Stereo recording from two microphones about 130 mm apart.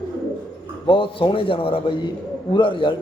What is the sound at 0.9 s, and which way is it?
A man's voice, 40° left (ahead or behind).